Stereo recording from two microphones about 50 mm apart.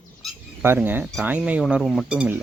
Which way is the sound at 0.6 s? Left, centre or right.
Right.